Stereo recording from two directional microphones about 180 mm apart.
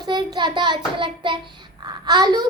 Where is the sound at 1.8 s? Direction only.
25° right (ahead or behind).